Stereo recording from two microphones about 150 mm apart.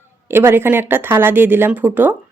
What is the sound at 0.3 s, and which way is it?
Speech, 15° right (ahead or behind).